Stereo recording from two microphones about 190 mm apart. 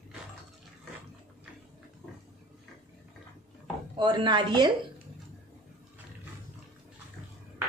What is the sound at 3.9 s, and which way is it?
Speech, 25° right (ahead or behind).